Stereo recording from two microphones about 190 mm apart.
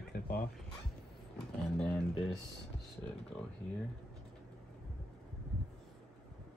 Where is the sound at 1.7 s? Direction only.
5° left (ahead or behind).